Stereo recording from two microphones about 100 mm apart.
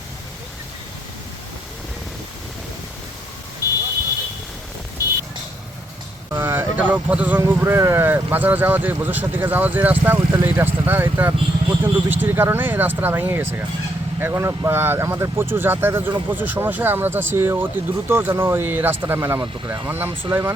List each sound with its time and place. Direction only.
3.6 s vehicle: 35° left (ahead or behind)
6.3 s speech: 20° right (ahead or behind)
19.4 s speech: 40° right (ahead or behind)
19.9 s speech: 20° right (ahead or behind)